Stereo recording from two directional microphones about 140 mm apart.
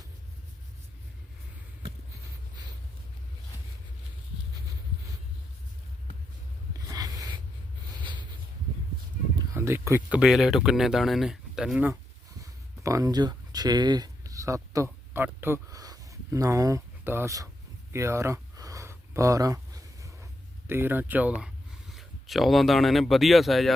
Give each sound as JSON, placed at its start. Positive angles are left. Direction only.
{"t": 6.8, "sound": "a sound", "side_deg": -25}
{"t": 9.6, "sound": "speech", "side_deg": -20}
{"t": 10.2, "sound": "speech", "side_deg": 0}
{"t": 12.4, "sound": "a sound", "side_deg": -25}
{"t": 20.7, "sound": "speech", "side_deg": -15}
{"t": 21.4, "sound": "speech", "side_deg": 0}